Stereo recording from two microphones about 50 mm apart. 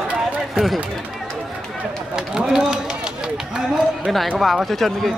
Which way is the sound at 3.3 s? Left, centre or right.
Centre.